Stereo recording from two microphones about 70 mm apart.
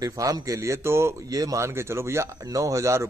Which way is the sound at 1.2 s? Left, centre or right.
Right.